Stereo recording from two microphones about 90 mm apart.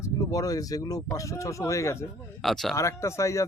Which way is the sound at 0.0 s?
40° left (ahead or behind).